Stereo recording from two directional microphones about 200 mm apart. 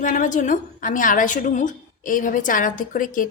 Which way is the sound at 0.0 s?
40° left (ahead or behind).